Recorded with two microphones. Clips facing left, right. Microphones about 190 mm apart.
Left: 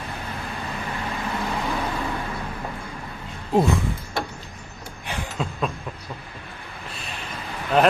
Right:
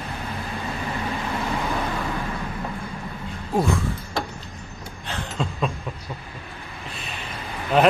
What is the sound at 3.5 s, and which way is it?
Speech, 20° left (ahead or behind).